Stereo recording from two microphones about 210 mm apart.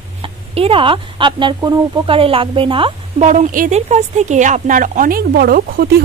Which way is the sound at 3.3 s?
40° right (ahead or behind).